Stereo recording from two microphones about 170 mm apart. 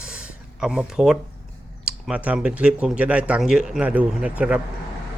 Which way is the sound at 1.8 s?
5° right (ahead or behind).